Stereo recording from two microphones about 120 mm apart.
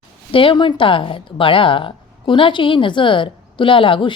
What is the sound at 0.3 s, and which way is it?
A woman's voice, 45° left (ahead or behind).